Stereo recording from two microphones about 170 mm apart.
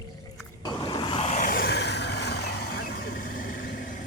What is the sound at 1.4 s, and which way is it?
Vehicle, 65° left (ahead or behind).